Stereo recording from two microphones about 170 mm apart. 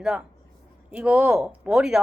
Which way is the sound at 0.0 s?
5° right (ahead or behind).